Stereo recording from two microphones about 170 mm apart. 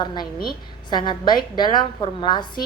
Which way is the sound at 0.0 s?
25° left (ahead or behind).